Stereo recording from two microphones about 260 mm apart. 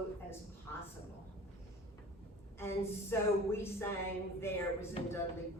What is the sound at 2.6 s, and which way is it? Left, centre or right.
Speech, centre.